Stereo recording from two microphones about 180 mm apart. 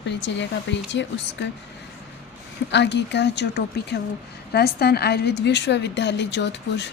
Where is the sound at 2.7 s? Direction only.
75° left (ahead or behind).